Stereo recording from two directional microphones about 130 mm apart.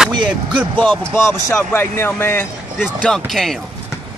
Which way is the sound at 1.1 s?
20° left (ahead or behind).